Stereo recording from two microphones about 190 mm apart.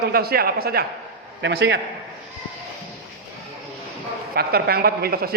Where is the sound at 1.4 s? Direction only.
65° right (ahead or behind).